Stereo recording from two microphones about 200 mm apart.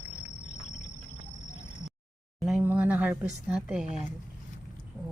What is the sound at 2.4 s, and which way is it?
Speech, 5° right (ahead or behind).